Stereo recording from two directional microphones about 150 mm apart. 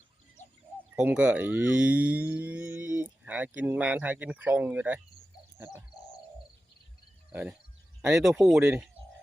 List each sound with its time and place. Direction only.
0.9 s speech: 5° right (ahead or behind)
5.5 s a sound: 15° right (ahead or behind)
8.0 s speech: 5° right (ahead or behind)